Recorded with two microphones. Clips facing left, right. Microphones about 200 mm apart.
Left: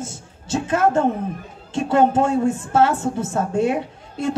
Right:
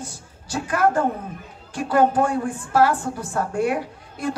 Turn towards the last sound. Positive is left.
turn(degrees=25)  # may be behind; listen again after turning